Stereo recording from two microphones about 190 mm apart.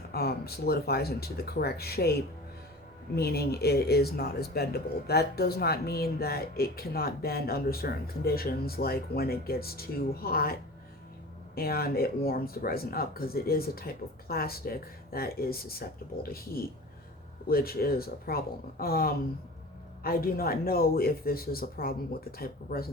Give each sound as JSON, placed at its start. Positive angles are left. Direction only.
{"t": 0.1, "sound": "speech", "side_deg": 55}